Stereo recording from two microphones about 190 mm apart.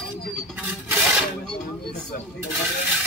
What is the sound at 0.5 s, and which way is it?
Rub, 10° right (ahead or behind).